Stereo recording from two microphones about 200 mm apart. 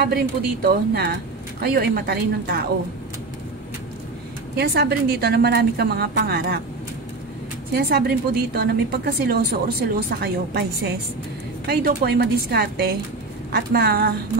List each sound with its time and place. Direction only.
0.0 s a woman's voice: 50° right (ahead or behind)
4.6 s a woman's voice: 55° right (ahead or behind)
7.7 s a woman's voice: 50° right (ahead or behind)
11.6 s a woman's voice: 50° right (ahead or behind)